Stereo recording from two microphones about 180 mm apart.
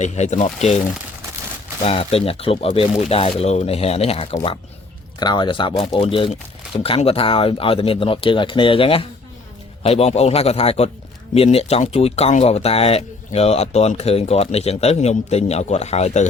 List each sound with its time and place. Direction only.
0.0 s speech: 40° left (ahead or behind)
1.8 s speech: 35° left (ahead or behind)